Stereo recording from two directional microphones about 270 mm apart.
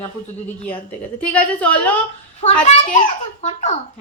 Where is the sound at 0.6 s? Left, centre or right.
Centre.